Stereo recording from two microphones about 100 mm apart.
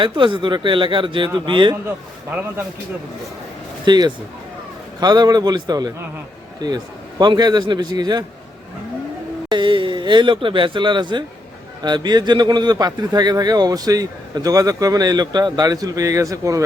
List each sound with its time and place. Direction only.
0.0 s speech: 55° right (ahead or behind)
3.8 s a man's voice: 45° right (ahead or behind)
9.5 s a man's voice: 55° right (ahead or behind); by 16.6 s 35° right (ahead or behind)